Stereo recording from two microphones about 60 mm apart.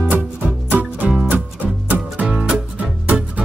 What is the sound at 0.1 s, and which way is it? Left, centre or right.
Music, right.